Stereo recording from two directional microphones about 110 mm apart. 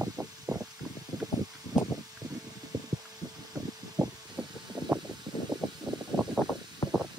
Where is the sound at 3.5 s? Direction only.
5° right (ahead or behind).